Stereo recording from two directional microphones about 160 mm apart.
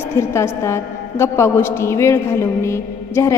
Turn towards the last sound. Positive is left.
turn(degrees=15)  # may be behind; listen again after turning